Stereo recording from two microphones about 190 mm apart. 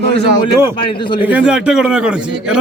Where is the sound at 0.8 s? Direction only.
25° left (ahead or behind).